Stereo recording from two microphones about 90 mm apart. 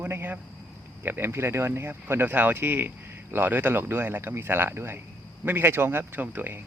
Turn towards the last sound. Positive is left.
turn(degrees=-20)  # may be behind; listen again after turning